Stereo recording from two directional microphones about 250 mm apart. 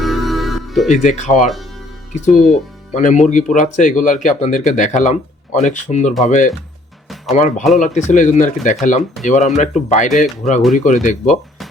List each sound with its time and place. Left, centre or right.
0.0 s music: centre
0.9 s speech: left
2.5 s speech: left